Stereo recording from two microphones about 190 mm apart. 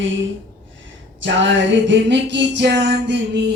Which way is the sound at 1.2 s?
80° right.